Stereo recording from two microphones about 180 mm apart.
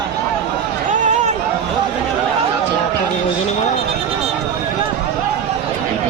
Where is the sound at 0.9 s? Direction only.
40° right (ahead or behind).